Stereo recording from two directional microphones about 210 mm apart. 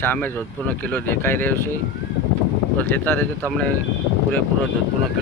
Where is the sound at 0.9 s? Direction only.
10° left (ahead or behind).